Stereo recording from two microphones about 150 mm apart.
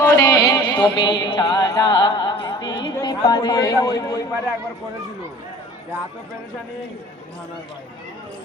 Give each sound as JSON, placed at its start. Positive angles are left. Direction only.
{"t": 0.0, "sound": "music", "side_deg": 20}